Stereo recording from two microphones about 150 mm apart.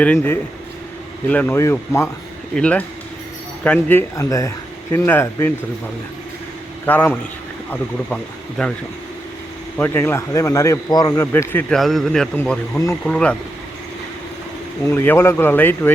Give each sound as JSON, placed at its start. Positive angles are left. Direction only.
{"t": 0.0, "sound": "speech", "side_deg": 10}
{"t": 4.1, "sound": "speech", "side_deg": 20}
{"t": 6.8, "sound": "speech", "side_deg": 10}
{"t": 9.7, "sound": "speech", "side_deg": 15}
{"t": 11.3, "sound": "speech", "side_deg": 15}
{"t": 11.8, "sound": "speech", "side_deg": 0}
{"t": 12.4, "sound": "speech", "side_deg": 15}
{"t": 14.8, "sound": "speech", "side_deg": 15}